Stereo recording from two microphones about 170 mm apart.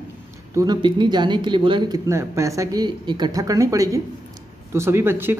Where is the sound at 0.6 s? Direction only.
25° right (ahead or behind).